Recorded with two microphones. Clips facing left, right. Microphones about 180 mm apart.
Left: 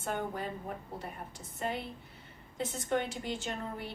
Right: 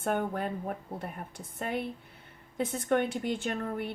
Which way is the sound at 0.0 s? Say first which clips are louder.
Right 5 dB; 55° right (ahead or behind).